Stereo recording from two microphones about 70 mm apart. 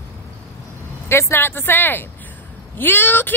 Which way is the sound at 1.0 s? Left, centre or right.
Left.